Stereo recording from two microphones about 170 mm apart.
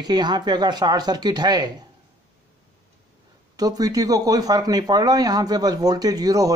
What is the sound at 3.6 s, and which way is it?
Speech, 20° right (ahead or behind).